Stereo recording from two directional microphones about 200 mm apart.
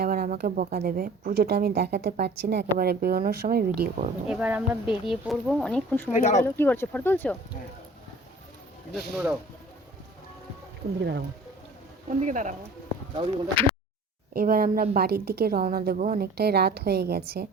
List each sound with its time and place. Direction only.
0.0 s speech: 50° right (ahead or behind)
4.3 s speech: 5° right (ahead or behind)
6.1 s speech: 35° left (ahead or behind)
6.4 s speech: 10° left (ahead or behind)
9.0 s speech: 5° right (ahead or behind)
12.2 s speech: 40° right (ahead or behind)
13.1 s speech: 25° right (ahead or behind)
14.3 s speech: 50° right (ahead or behind)